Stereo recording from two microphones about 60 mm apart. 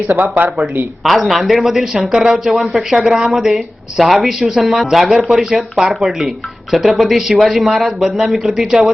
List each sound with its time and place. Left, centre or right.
0.1 s speech: right
1.0 s speech: centre